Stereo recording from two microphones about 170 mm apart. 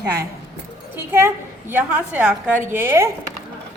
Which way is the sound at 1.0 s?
15° right (ahead or behind).